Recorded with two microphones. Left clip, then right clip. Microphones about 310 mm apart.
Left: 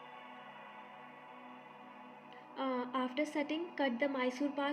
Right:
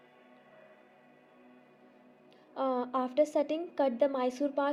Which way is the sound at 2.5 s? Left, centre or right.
Right.